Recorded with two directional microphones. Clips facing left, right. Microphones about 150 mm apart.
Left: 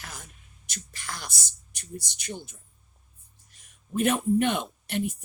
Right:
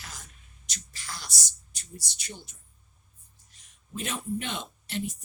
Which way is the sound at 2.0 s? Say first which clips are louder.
Left 6 dB; 55° left (ahead or behind).